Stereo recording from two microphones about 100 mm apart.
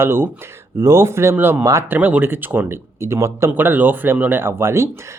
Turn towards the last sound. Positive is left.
turn(degrees=-25)  # may be behind; listen again after turning